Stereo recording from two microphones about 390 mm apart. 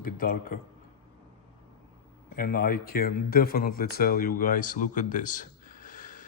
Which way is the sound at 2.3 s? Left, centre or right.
Left.